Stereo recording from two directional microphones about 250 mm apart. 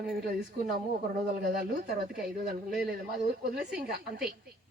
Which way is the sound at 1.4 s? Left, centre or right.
Right.